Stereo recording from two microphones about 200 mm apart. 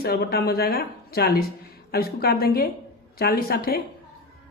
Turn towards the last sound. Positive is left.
turn(degrees=50)  # may be behind; listen again after turning